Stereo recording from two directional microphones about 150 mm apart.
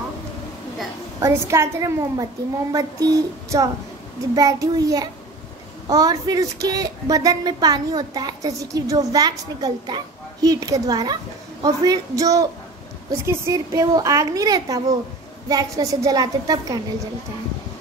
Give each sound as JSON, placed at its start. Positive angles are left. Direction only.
{"t": 1.2, "sound": "speech", "side_deg": -20}